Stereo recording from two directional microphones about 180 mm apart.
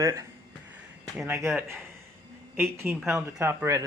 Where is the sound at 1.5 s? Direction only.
10° right (ahead or behind).